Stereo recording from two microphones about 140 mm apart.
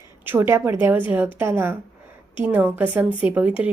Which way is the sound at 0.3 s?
15° right (ahead or behind).